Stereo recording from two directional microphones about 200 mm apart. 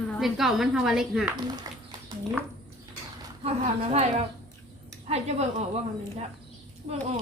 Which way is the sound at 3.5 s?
30° right (ahead or behind).